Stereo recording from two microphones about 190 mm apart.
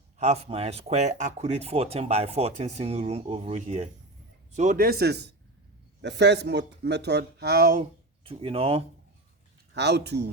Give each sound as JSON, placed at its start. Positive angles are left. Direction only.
{"t": 0.2, "sound": "a man's voice", "side_deg": -35}
{"t": 8.2, "sound": "speech", "side_deg": -30}
{"t": 9.7, "sound": "speech", "side_deg": -65}